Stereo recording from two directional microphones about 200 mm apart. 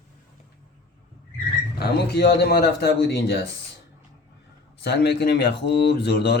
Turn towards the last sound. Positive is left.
turn(degrees=55)  # may be behind; listen again after turning